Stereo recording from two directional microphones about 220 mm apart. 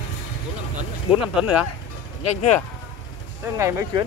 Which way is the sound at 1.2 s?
5° right (ahead or behind).